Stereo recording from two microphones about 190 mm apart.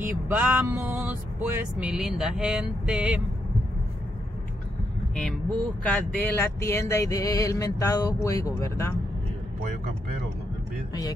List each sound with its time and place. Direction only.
0.0 s vehicle: 10° right (ahead or behind)
5.1 s speech: 5° left (ahead or behind)
10.9 s speech: 20° left (ahead or behind)